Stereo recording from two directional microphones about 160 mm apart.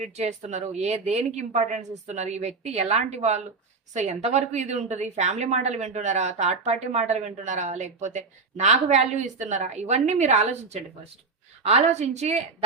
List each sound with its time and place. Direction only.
0.0 s a woman's voice: 45° right (ahead or behind)